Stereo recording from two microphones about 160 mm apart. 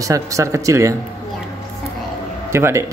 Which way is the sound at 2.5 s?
15° right (ahead or behind).